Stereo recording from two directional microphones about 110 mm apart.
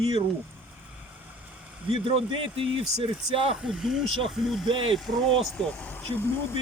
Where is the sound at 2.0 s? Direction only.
55° right (ahead or behind).